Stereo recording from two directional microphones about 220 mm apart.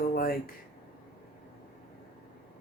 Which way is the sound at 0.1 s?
40° left (ahead or behind).